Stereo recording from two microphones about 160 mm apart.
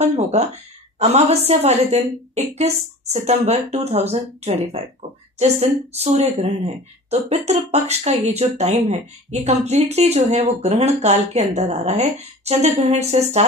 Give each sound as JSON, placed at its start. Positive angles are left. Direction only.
{"t": 0.1, "sound": "a woman's voice", "side_deg": -40}